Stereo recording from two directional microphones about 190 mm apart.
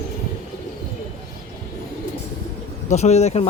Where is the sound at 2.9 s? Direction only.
35° left (ahead or behind).